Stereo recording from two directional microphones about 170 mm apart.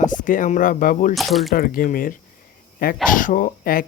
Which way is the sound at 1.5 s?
60° left (ahead or behind).